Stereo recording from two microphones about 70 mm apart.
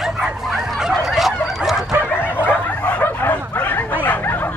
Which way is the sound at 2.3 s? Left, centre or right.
Left.